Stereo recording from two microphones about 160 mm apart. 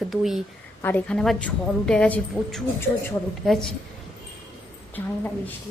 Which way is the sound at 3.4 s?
Centre (ahead or behind).